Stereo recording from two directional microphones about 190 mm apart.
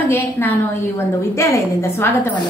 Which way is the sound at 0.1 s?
10° left (ahead or behind).